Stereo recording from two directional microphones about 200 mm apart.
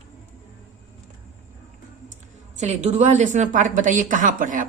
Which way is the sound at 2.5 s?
35° right (ahead or behind).